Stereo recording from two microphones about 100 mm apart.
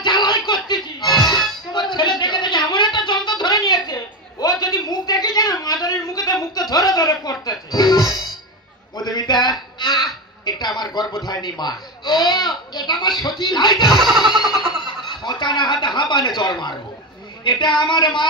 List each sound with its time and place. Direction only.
0.0 s music: 50° left (ahead or behind)
1.7 s a sound: 50° left (ahead or behind)
6.7 s music: 35° left (ahead or behind)
8.9 s a sound: 40° left (ahead or behind)
13.4 s speech: 45° left (ahead or behind)
13.9 s music: centre (ahead or behind)
14.2 s music: 50° left (ahead or behind)
14.8 s chuckle: 45° left (ahead or behind)
17.4 s speech: 50° left (ahead or behind)